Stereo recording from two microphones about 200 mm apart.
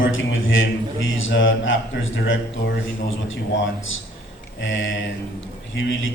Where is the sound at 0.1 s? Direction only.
75° left (ahead or behind).